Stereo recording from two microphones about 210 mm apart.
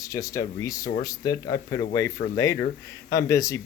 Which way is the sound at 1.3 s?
45° left (ahead or behind).